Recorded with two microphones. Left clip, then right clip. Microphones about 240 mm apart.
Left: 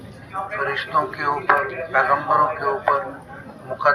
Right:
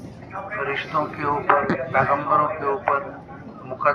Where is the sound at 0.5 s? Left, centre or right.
Left.